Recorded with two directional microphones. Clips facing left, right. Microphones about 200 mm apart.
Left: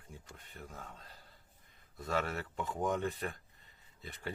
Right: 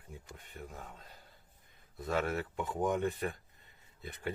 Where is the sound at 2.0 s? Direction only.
Centre (ahead or behind).